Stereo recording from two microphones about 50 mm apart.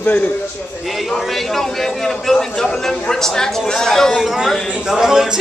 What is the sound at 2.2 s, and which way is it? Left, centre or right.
A man's voice, centre.